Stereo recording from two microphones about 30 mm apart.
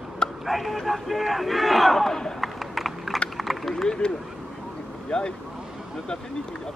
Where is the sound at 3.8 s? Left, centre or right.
Left.